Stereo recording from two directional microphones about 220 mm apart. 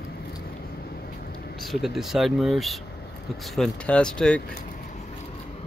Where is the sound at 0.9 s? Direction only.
45° left (ahead or behind).